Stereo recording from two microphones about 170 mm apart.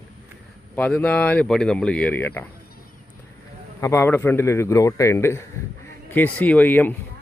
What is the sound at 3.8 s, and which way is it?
Speech, 15° left (ahead or behind).